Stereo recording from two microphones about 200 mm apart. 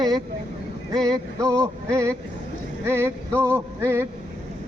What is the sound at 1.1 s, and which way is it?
A man's voice, 15° right (ahead or behind).